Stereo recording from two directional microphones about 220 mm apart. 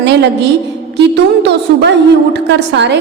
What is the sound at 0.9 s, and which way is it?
A woman's voice, 50° right (ahead or behind).